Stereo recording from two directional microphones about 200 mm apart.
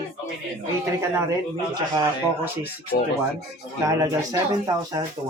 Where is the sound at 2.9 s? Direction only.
50° left (ahead or behind).